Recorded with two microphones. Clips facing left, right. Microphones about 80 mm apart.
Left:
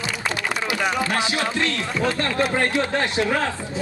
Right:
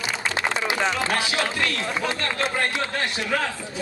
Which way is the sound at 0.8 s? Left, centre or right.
Left.